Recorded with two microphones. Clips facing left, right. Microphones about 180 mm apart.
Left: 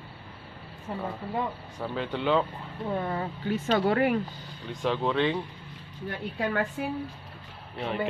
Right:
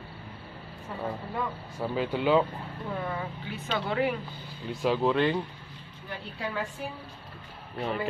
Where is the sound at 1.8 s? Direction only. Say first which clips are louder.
Right 2 dB; 10° right (ahead or behind).